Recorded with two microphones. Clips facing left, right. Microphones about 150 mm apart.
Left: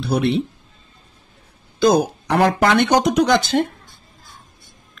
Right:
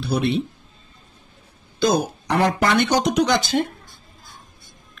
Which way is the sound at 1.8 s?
60° left (ahead or behind).